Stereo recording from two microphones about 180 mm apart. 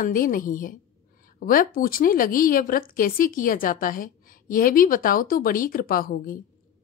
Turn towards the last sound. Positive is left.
turn(degrees=50)  # may be behind; listen again after turning